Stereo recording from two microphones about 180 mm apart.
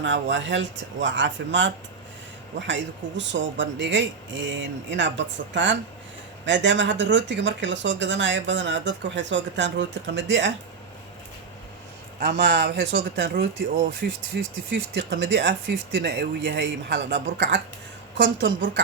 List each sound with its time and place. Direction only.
0.0 s speech: 85° right
12.2 s speech: 75° right (ahead or behind)
14.0 s speech: 55° right (ahead or behind)
14.7 s speech: 85° right; by 17.6 s 70° right (ahead or behind)
18.2 s speech: 85° right